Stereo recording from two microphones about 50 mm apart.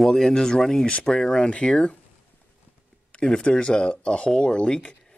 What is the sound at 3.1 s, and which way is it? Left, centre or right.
Speech, centre.